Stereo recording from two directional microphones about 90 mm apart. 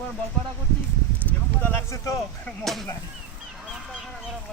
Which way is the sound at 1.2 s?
20° left (ahead or behind).